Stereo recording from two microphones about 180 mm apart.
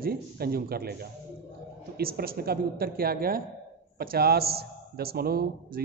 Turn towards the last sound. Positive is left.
turn(degrees=-60)  # may be behind; listen again after turning